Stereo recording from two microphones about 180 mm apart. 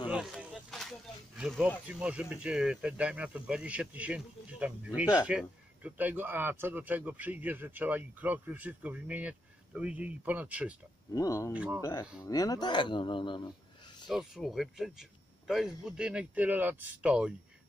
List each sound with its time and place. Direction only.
0.1 s a sound: 5° right (ahead or behind)
1.9 s speech: 5° right (ahead or behind)
11.1 s speech: 20° left (ahead or behind)
11.5 s speech: 10° right (ahead or behind)
11.8 s speech: 20° left (ahead or behind)
14.0 s speech: centre (ahead or behind)